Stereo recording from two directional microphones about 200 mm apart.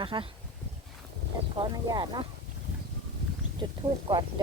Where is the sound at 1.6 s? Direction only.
20° right (ahead or behind).